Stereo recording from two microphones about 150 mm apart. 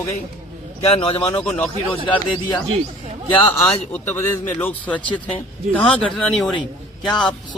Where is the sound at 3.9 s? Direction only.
15° left (ahead or behind).